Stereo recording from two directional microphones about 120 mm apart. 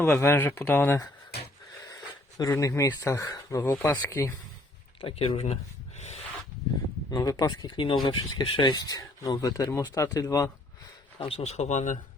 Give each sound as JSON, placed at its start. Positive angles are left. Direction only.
{"t": 0.0, "sound": "speech", "side_deg": 20}
{"t": 2.4, "sound": "speech", "side_deg": 25}
{"t": 3.6, "sound": "speech", "side_deg": 20}
{"t": 4.9, "sound": "speech", "side_deg": 50}
{"t": 6.0, "sound": "a sound", "side_deg": 65}
{"t": 7.1, "sound": "speech", "side_deg": 30}
{"t": 7.8, "sound": "speech", "side_deg": 45}
{"t": 11.2, "sound": "speech", "side_deg": 55}